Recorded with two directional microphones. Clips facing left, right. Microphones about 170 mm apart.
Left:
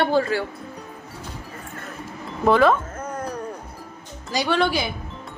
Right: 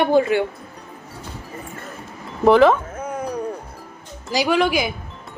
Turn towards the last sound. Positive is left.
turn(degrees=-10)  # may be behind; listen again after turning